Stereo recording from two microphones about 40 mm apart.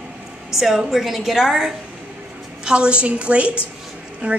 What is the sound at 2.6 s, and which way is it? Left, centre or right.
A woman's voice, right.